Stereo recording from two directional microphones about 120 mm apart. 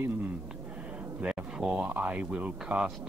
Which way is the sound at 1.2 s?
10° right (ahead or behind).